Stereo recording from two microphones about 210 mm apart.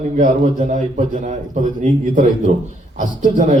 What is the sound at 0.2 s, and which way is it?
A man's voice, 35° right (ahead or behind).